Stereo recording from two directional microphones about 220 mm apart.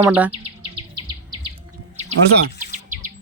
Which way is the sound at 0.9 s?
20° right (ahead or behind).